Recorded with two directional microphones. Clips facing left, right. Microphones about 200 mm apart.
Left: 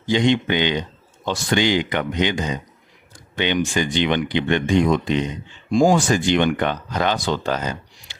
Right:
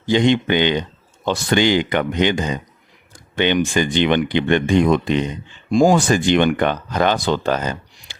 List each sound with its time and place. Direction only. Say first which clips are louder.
0.1 s speech: right 3 dB; 55° right (ahead or behind)